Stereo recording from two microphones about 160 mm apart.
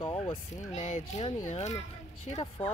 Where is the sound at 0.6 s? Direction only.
40° left (ahead or behind).